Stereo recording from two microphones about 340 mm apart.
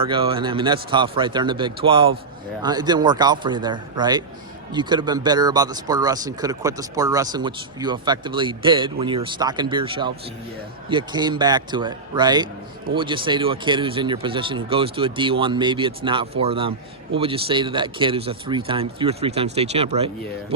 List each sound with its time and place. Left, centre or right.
0.0 s speech: centre